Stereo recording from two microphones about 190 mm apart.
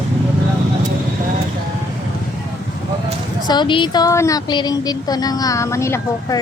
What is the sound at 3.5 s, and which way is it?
Speech, 25° left (ahead or behind).